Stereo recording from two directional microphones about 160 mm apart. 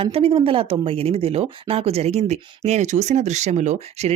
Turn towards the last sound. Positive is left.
turn(degrees=-45)  # may be behind; listen again after turning